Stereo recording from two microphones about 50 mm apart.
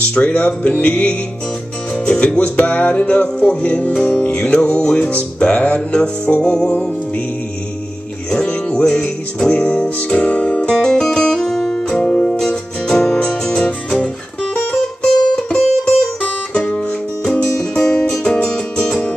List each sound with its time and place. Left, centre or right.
0.1 s music: left
2.5 s music: left; by 6.9 s centre
8.3 s music: centre
10.7 s music: centre
12.0 s music: left
12.4 s music: centre